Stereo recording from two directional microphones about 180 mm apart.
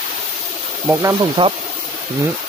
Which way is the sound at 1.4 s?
25° right (ahead or behind).